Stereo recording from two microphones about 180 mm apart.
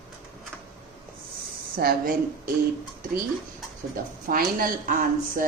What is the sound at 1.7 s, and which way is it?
Speech, 55° right (ahead or behind).